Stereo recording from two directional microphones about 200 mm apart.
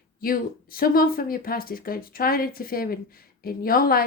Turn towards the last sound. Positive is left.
turn(degrees=45)  # may be behind; listen again after turning